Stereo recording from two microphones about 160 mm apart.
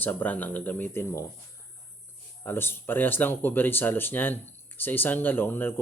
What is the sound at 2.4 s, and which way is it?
Speech, 15° left (ahead or behind).